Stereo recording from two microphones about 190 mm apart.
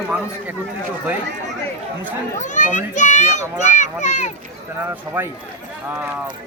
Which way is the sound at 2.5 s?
40° left (ahead or behind).